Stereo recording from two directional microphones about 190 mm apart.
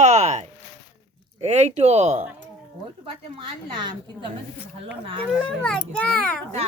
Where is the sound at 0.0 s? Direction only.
40° right (ahead or behind).